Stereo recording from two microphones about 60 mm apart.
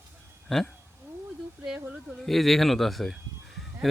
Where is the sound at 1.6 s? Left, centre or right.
Centre.